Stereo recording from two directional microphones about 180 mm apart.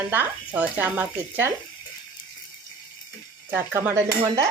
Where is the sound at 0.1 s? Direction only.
10° right (ahead or behind).